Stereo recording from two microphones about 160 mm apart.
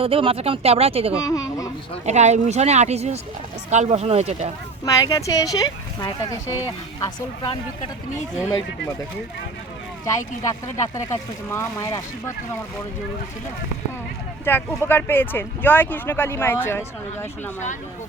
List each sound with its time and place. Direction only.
0.0 s speech: 35° right (ahead or behind)
1.1 s a child's voice: 20° left (ahead or behind)
2.0 s speech: 45° right (ahead or behind)
4.9 s speech: 20° left (ahead or behind)
10.1 s speech: 20° left (ahead or behind)
14.4 s speech: 15° left (ahead or behind)